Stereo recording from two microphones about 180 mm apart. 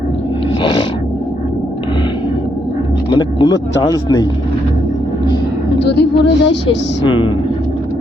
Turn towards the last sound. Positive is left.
turn(degrees=25)  # may be behind; listen again after turning